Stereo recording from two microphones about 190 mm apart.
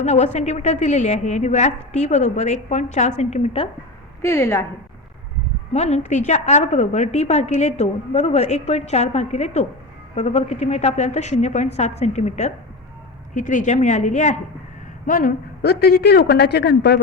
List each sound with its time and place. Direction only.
0.0 s a woman's voice: 35° left (ahead or behind)
4.2 s a woman's voice: 15° left (ahead or behind)
5.7 s a woman's voice: 35° left (ahead or behind); by 17.0 s 60° left (ahead or behind)